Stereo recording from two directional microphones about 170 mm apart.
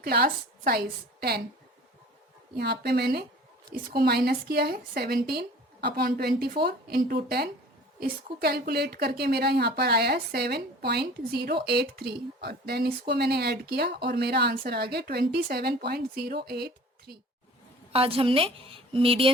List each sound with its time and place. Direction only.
0.0 s a woman's voice: 65° right (ahead or behind)
2.6 s a woman's voice: 70° right (ahead or behind)
17.9 s a woman's voice: 35° right (ahead or behind)